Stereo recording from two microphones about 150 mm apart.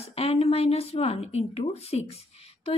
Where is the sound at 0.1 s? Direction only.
40° left (ahead or behind).